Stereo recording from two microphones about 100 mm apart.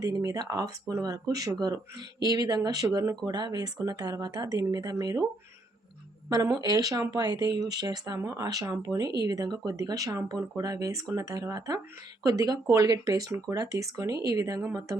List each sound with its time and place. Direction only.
0.0 s speech: 35° right (ahead or behind)
3.2 s speech: 45° right (ahead or behind)
6.3 s speech: 40° right (ahead or behind)